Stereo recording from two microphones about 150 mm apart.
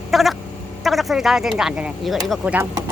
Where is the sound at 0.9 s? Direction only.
Centre (ahead or behind).